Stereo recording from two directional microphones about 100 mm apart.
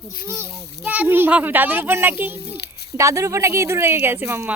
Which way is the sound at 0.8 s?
15° right (ahead or behind).